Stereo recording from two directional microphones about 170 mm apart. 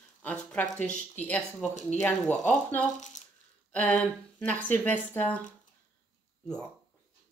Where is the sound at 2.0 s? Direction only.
10° left (ahead or behind).